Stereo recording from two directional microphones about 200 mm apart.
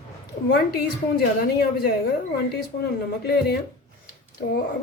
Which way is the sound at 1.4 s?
50° left (ahead or behind).